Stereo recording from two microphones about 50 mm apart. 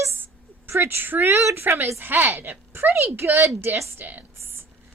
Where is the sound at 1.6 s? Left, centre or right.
Right.